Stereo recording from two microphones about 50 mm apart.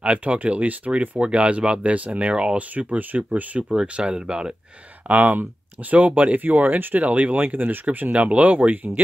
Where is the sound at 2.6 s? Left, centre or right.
Right.